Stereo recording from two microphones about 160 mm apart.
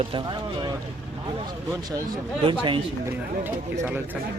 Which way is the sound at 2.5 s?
30° right (ahead or behind).